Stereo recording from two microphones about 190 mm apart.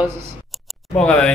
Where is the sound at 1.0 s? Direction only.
5° left (ahead or behind).